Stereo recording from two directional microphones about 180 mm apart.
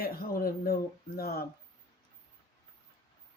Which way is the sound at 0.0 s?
55° left (ahead or behind).